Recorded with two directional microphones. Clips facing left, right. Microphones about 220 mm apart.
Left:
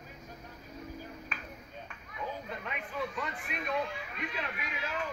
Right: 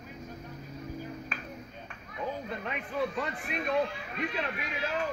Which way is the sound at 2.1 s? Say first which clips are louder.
Right 4 dB; 35° right (ahead or behind).